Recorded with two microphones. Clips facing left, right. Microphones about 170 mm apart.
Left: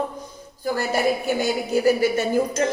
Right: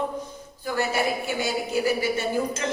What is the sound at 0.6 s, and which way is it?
A woman's voice, 40° left (ahead or behind).